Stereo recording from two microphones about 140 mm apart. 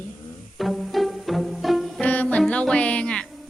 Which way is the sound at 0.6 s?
Centre (ahead or behind).